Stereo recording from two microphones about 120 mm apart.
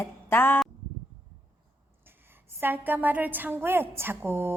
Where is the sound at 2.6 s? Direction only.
15° right (ahead or behind).